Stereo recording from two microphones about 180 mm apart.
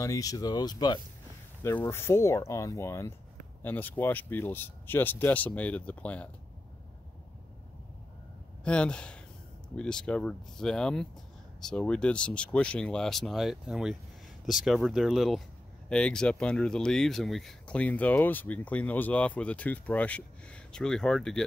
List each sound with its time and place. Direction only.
0.0 s speech: 20° left (ahead or behind)
8.6 s speech: 5° left (ahead or behind)